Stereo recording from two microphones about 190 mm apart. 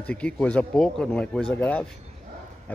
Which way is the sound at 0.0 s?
5° left (ahead or behind).